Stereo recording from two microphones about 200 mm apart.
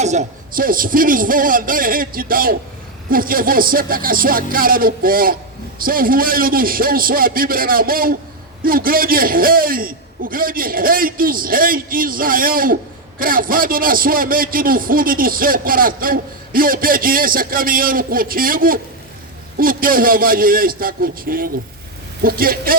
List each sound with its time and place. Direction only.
0.0 s a man's voice: 35° right (ahead or behind)